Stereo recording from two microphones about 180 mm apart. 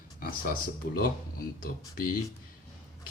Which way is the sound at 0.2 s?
50° left (ahead or behind).